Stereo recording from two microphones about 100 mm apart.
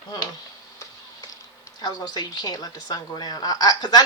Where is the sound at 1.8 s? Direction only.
45° left (ahead or behind).